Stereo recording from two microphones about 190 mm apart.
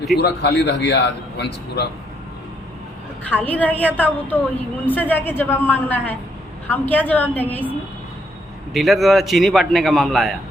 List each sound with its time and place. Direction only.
0.2 s a man's voice: 60° left (ahead or behind)
3.2 s a woman's voice: 10° left (ahead or behind)
8.7 s a man's voice: centre (ahead or behind)